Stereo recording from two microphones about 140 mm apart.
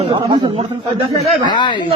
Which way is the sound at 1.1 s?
30° left (ahead or behind).